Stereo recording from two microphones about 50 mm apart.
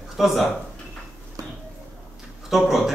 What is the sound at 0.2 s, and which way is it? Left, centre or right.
Speech, centre.